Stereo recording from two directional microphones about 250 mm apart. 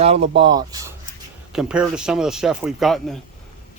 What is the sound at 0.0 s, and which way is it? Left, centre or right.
Speech, right.